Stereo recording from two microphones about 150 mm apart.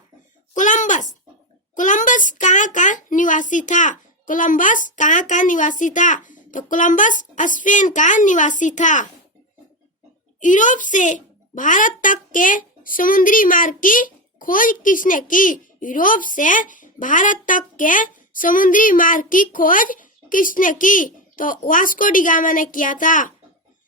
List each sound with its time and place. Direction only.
0.5 s a sound: 55° left (ahead or behind)
1.7 s a child's voice: 60° left (ahead or behind)
10.4 s a child's voice: 60° left (ahead or behind)